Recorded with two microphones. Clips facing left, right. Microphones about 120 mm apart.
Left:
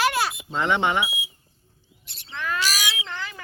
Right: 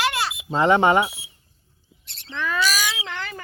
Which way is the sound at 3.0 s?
65° right (ahead or behind).